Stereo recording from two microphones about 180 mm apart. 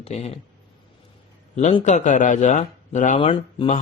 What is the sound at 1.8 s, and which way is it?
Speech, 45° left (ahead or behind).